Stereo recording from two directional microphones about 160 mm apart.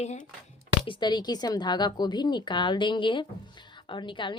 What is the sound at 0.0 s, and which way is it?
Speech, 45° left (ahead or behind).